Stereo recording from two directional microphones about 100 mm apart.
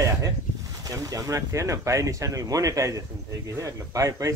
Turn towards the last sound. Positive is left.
turn(degrees=-35)  # may be behind; listen again after turning